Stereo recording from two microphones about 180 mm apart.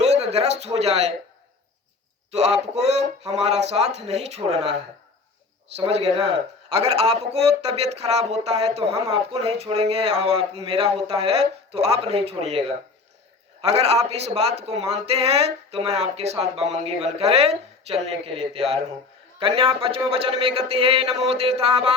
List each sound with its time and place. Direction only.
0.0 s speech: 35° right (ahead or behind)
2.3 s speech: 35° right (ahead or behind)
5.7 s speech: 35° right (ahead or behind)